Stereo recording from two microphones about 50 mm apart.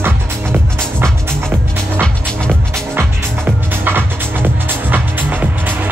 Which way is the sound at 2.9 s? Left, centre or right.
Right.